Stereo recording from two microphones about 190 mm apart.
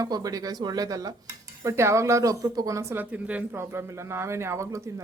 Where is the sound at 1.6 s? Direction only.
15° right (ahead or behind).